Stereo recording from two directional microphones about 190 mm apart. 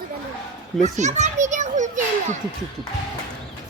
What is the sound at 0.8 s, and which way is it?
Children playing, 40° right (ahead or behind).